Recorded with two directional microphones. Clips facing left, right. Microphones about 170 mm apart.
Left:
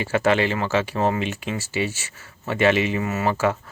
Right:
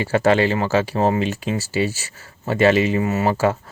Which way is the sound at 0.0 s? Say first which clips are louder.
Right 3 dB; 35° right (ahead or behind).